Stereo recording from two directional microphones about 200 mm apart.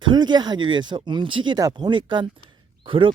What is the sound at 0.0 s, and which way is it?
Speech, 20° right (ahead or behind).